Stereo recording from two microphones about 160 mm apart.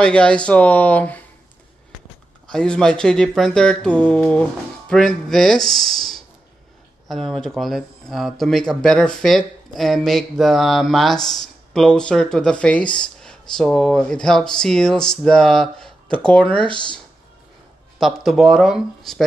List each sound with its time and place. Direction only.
0.0 s speech: 5° left (ahead or behind)
2.5 s speech: 5° left (ahead or behind)
17.9 s speech: centre (ahead or behind)